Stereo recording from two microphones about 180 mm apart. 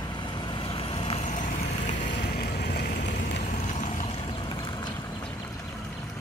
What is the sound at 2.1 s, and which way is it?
Vehicle, 60° left (ahead or behind).